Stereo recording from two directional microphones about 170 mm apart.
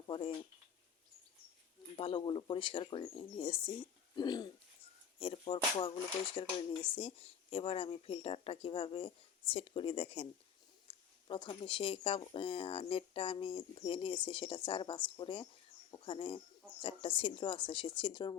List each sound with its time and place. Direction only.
0.1 s speech: 30° left (ahead or behind)
2.0 s speech: 30° left (ahead or behind)